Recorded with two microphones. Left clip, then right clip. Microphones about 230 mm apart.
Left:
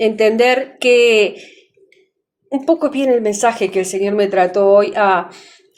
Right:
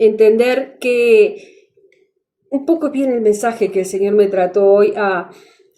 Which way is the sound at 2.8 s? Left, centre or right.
Centre.